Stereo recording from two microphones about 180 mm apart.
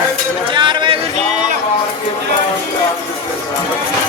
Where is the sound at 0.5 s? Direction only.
25° right (ahead or behind).